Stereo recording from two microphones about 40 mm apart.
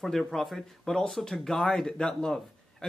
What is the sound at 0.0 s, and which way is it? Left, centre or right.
Speech, centre.